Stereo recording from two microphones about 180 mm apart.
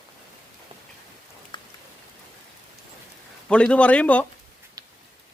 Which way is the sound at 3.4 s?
5° left (ahead or behind).